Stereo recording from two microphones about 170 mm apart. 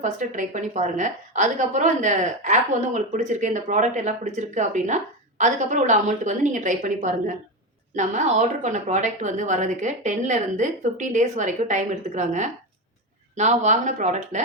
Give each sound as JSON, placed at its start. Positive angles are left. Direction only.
{"t": 0.0, "sound": "a woman's voice", "side_deg": -45}